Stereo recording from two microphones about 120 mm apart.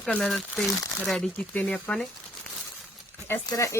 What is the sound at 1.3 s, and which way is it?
Speech, 15° left (ahead or behind).